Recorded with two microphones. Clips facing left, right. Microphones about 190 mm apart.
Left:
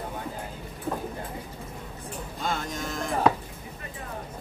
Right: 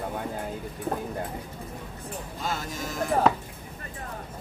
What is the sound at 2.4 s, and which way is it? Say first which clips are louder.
Music: left 2 dB; 5° right (ahead or behind).